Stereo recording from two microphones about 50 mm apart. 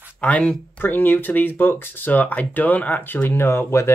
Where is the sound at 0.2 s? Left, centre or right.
Left.